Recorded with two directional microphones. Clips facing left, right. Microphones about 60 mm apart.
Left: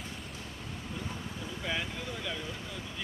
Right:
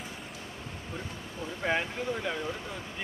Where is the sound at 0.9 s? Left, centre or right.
Right.